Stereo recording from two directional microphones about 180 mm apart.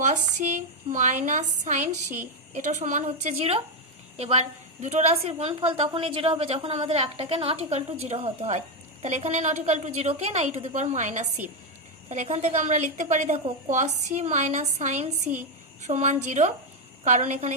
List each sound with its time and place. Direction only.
0.0 s a woman's voice: 45° right (ahead or behind)